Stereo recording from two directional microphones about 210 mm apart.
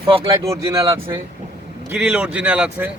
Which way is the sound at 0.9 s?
25° right (ahead or behind).